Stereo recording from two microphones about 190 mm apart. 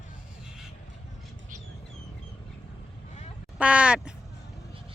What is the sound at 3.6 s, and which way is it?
Duck, 5° right (ahead or behind).